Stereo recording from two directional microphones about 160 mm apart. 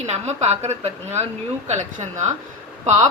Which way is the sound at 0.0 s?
45° right (ahead or behind).